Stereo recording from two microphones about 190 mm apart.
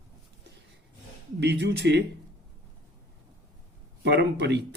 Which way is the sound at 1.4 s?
65° right (ahead or behind).